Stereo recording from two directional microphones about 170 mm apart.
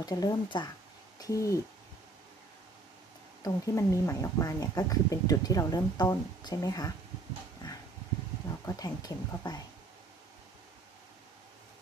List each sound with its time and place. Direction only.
0.0 s speech: 20° left (ahead or behind)
3.4 s speech: 20° left (ahead or behind)
8.6 s speech: 20° left (ahead or behind)